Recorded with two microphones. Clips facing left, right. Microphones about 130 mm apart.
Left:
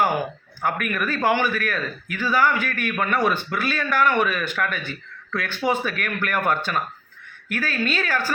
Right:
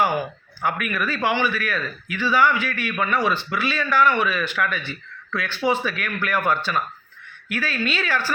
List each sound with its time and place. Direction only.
0.6 s speech: 45° left (ahead or behind)